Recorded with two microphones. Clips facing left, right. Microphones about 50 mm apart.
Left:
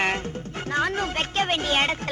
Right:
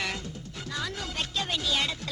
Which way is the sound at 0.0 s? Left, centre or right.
Left.